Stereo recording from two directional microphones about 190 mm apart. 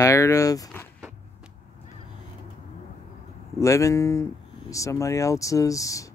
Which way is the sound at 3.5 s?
15° left (ahead or behind).